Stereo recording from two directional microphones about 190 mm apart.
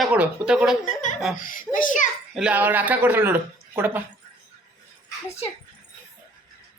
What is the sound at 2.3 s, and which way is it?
Speech, 5° right (ahead or behind).